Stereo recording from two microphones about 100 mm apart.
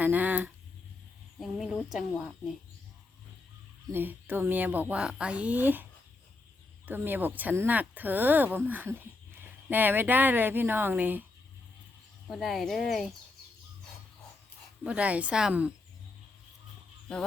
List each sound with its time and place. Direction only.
0.0 s a sound: 15° right (ahead or behind)
1.4 s speech: centre (ahead or behind)
3.9 s a woman's voice: 20° right (ahead or behind)
12.3 s speech: centre (ahead or behind)
14.8 s a woman's voice: 15° right (ahead or behind)